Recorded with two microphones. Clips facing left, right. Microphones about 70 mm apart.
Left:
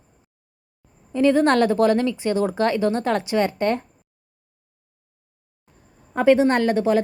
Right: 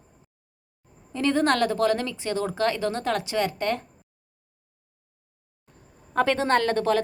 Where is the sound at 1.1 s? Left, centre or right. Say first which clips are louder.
Left 5 dB; centre.